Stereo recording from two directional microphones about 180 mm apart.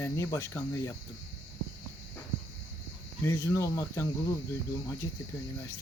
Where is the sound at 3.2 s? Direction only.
15° left (ahead or behind).